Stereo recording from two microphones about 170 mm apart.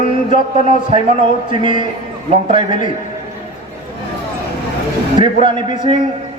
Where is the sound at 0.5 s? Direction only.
35° right (ahead or behind).